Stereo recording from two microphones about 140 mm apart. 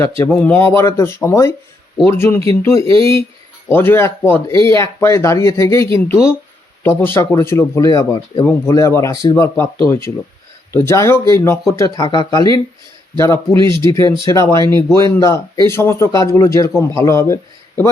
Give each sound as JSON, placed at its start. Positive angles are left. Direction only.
{"t": 0.0, "sound": "a man's voice", "side_deg": 15}
{"t": 14.5, "sound": "speech", "side_deg": -35}
{"t": 15.1, "sound": "a man's voice", "side_deg": 20}